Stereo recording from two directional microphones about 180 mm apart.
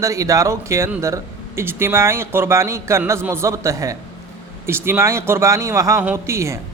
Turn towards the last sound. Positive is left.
turn(degrees=-15)  # may be behind; listen again after turning